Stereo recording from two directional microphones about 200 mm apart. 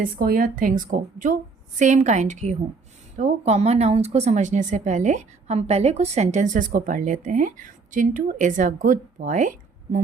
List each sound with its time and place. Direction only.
0.0 s a woman's voice: 45° right (ahead or behind)